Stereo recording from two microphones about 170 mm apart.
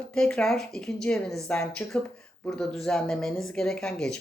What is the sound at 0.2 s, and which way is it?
Speech, 5° left (ahead or behind).